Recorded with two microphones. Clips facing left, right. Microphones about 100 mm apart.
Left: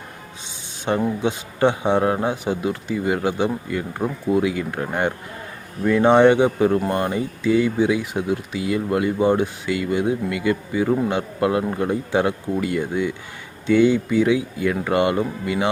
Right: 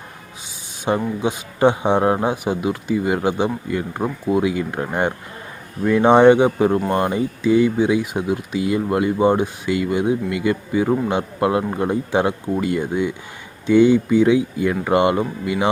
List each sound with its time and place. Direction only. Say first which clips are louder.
0.9 s speech: right 1 dB; 15° right (ahead or behind)